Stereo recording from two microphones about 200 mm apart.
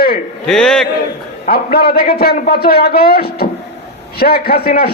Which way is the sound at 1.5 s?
50° left (ahead or behind).